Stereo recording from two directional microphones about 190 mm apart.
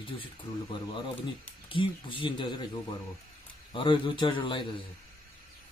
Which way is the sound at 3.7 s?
25° left (ahead or behind).